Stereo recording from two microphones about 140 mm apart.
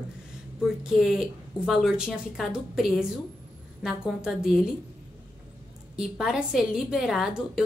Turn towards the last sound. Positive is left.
turn(degrees=-5)  # may be behind; listen again after turning